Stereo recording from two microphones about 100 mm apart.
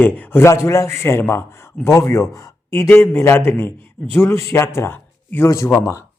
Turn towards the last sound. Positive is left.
turn(degrees=25)  # may be behind; listen again after turning